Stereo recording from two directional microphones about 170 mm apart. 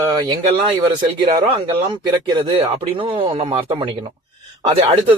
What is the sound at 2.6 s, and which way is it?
A man's voice, 30° right (ahead or behind).